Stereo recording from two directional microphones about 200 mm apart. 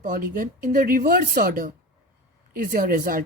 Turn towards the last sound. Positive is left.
turn(degrees=-45)  # may be behind; listen again after turning